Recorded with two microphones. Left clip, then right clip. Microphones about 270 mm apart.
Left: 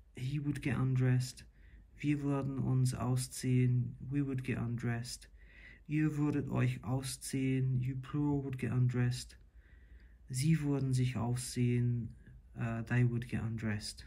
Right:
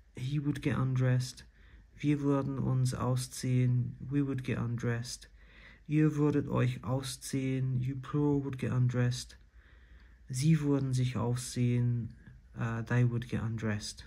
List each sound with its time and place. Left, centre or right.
0.1 s speech: centre